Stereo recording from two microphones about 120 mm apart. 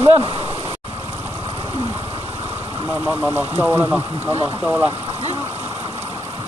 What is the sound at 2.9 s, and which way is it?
Speech, 15° right (ahead or behind).